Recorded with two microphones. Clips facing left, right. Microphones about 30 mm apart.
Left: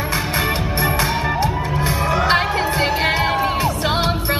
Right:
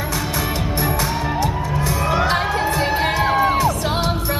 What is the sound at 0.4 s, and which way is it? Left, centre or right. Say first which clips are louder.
Music: left 3 dB; left.